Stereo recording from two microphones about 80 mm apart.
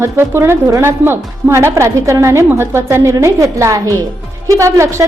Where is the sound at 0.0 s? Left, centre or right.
Right.